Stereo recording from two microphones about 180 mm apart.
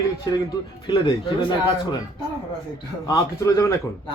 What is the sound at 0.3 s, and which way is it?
Speech, 20° left (ahead or behind).